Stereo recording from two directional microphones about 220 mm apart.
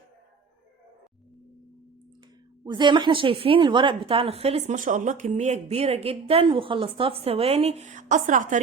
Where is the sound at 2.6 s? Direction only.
20° right (ahead or behind).